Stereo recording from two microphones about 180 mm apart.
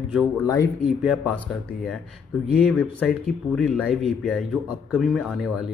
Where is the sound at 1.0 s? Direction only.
5° right (ahead or behind).